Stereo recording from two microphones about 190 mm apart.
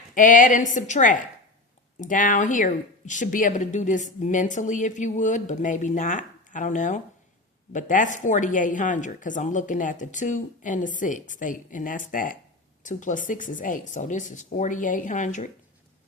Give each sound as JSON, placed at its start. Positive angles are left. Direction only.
{"t": 0.1, "sound": "a woman's voice", "side_deg": 45}